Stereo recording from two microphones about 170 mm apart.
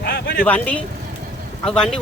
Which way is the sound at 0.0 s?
90° left.